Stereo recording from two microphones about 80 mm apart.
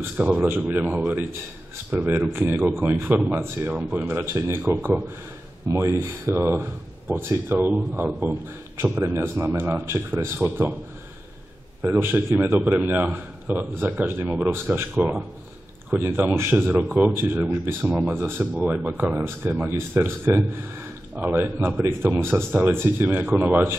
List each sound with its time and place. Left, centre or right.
0.2 s a man's voice: right
3.7 s a man's voice: centre
8.8 s a man's voice: right
11.8 s a man's voice: right